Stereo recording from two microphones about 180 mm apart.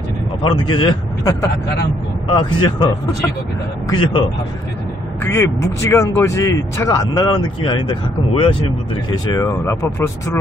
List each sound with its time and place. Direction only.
0.4 s a man's voice: 25° left (ahead or behind)
2.3 s a man's voice: 25° left (ahead or behind)
3.9 s a man's voice: 25° left (ahead or behind)
5.2 s a man's voice: 15° left (ahead or behind)